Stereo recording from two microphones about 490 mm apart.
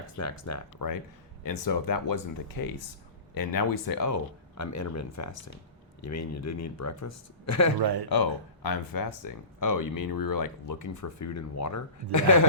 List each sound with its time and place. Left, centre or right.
0.2 s speech: left
5.3 s speech: left
6.0 s speech: left
7.8 s speech: right
8.6 s speech: left